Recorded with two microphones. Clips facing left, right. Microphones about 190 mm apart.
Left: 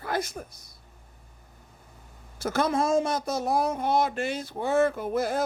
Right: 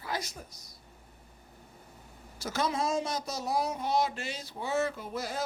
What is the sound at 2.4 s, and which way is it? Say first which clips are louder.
Speech: left 6 dB; 55° left (ahead or behind).